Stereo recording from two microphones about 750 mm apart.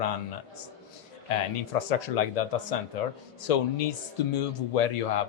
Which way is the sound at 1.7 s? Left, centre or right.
Left.